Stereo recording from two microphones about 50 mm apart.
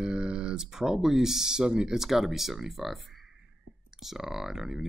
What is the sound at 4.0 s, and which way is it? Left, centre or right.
Speech, centre.